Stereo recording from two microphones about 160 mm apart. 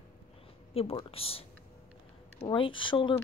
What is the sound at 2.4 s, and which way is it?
Speech, 30° left (ahead or behind).